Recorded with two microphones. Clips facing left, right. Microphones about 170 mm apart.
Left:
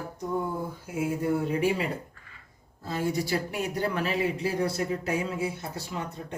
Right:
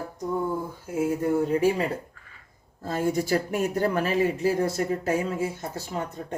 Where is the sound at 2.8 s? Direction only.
50° right (ahead or behind).